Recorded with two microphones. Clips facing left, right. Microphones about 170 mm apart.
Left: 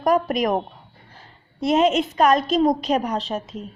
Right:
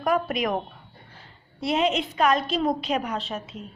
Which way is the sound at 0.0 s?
40° left (ahead or behind).